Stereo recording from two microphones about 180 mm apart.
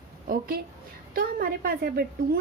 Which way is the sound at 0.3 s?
60° right (ahead or behind).